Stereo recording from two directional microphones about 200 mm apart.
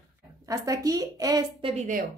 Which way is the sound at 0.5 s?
15° right (ahead or behind).